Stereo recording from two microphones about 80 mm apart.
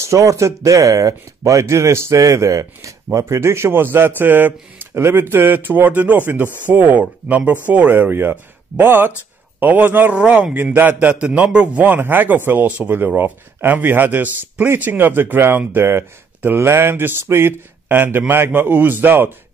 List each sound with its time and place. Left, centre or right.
0.0 s a man's voice: right